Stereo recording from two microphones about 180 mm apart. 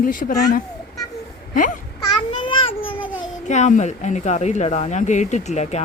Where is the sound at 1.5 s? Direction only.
45° left (ahead or behind).